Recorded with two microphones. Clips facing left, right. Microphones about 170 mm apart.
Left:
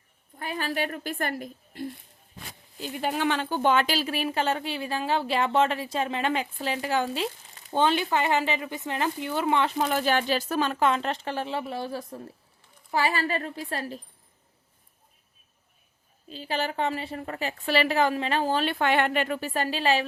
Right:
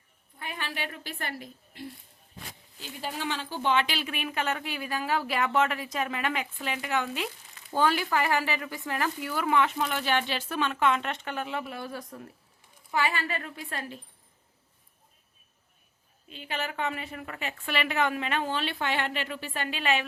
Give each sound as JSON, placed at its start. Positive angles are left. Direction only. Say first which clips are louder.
{"t": 0.3, "sound": "speech", "louder": "left 7 dB", "side_deg": 40}
{"t": 2.9, "sound": "speech", "louder": "left 7 dB", "side_deg": 65}
{"t": 16.3, "sound": "speech", "louder": "left 5 dB", "side_deg": 35}